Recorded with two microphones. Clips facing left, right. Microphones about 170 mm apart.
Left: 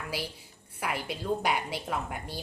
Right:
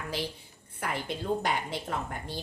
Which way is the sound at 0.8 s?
5° left (ahead or behind).